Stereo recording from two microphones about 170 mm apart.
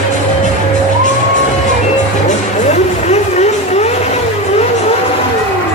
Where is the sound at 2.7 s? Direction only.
40° left (ahead or behind).